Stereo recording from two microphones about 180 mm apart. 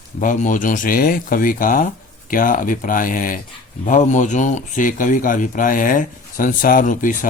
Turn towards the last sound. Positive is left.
turn(degrees=45)  # may be behind; listen again after turning